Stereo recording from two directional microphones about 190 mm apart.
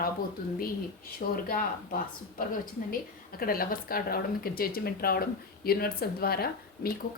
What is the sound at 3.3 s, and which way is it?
A woman's voice, 50° left (ahead or behind).